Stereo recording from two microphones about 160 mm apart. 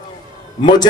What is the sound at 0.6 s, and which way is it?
Speech, 25° left (ahead or behind).